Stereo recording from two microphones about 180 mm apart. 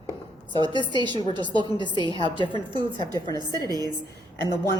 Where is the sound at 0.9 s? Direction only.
25° right (ahead or behind).